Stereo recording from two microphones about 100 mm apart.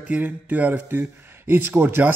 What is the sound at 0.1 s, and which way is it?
A man's voice, 15° right (ahead or behind).